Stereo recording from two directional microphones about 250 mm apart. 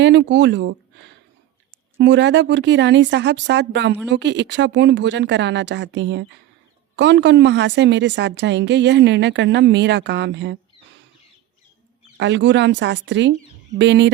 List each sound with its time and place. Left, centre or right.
0.0 s a woman's voice: right
12.1 s a woman's voice: right